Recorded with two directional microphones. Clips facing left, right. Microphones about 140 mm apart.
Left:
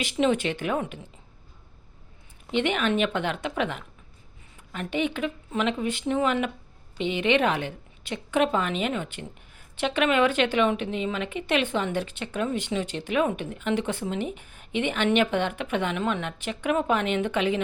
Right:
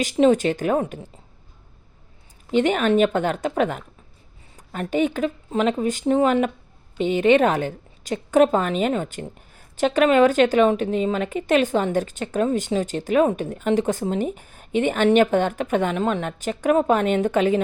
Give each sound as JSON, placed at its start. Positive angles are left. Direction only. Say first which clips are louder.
{"t": 0.0, "sound": "a woman's voice", "louder": "right 7 dB", "side_deg": -40}
{"t": 2.5, "sound": "a woman's voice", "louder": "right 6 dB", "side_deg": -40}